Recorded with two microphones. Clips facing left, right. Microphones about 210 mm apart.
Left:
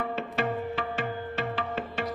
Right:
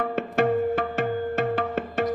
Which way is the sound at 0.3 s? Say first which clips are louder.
Right 10 dB; 50° right (ahead or behind).